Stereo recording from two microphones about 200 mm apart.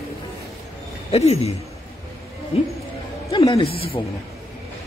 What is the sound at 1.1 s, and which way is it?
Speech, 30° left (ahead or behind).